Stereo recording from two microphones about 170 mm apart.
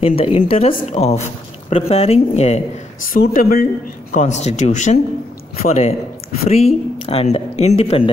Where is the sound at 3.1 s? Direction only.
55° left (ahead or behind).